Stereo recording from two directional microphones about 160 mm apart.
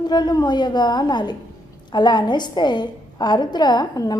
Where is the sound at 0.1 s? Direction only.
25° left (ahead or behind).